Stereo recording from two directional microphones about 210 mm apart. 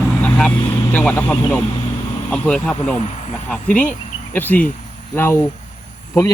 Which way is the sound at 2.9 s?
30° left (ahead or behind).